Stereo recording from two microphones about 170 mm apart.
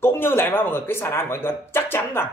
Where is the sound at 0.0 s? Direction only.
15° left (ahead or behind).